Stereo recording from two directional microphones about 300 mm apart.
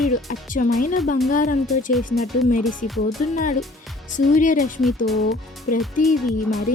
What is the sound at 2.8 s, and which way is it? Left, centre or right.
Speech, left.